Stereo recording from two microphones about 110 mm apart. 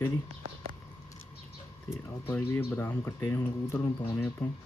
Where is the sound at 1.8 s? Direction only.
20° left (ahead or behind).